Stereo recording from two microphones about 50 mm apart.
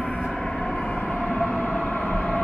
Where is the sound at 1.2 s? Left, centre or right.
Centre.